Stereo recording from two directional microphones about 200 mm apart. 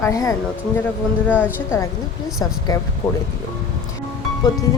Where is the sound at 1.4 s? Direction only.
10° left (ahead or behind).